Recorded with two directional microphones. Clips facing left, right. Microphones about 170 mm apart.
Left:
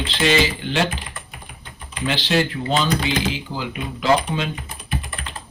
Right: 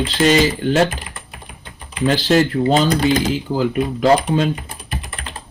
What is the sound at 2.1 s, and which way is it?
Speech, 45° right (ahead or behind).